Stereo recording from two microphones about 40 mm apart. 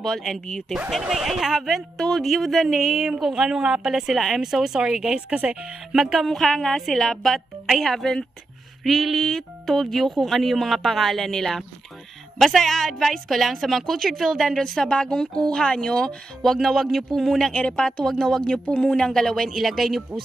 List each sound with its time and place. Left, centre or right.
0.0 s speech: centre
0.8 s speech: centre
3.3 s a woman's voice: centre
5.3 s speech: right
5.9 s a woman's voice: centre
6.1 s speech: centre
14.7 s speech: left
16.6 s speech: centre
17.5 s speech: left; by 20.0 s centre